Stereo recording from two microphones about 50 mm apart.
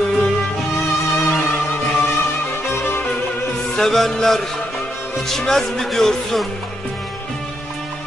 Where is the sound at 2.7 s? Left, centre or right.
Left.